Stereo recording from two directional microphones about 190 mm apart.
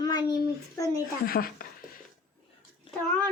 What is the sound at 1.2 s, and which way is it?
Speech, 50° left (ahead or behind).